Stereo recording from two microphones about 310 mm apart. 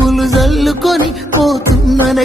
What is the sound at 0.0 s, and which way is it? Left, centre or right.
Music, centre.